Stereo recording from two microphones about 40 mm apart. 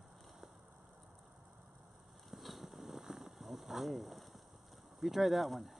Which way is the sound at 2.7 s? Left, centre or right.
Centre.